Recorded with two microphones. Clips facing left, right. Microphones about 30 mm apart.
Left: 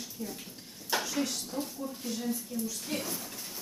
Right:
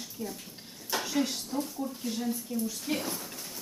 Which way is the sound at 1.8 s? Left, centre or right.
Centre.